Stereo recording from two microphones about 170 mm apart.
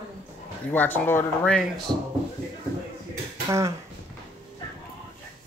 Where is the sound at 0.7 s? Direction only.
10° left (ahead or behind).